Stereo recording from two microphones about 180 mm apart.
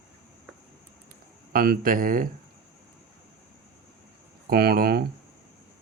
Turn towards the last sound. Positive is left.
turn(degrees=-60)  # may be behind; listen again after turning